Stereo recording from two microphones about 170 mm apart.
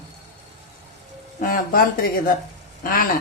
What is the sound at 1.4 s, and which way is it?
Speech, 55° left (ahead or behind).